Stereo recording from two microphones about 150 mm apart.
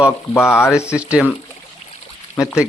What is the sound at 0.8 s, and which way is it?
Speech, 10° right (ahead or behind).